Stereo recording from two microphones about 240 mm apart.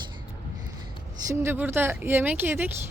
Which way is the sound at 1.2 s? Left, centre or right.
Centre.